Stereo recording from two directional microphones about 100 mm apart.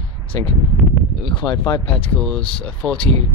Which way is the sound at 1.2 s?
55° left (ahead or behind).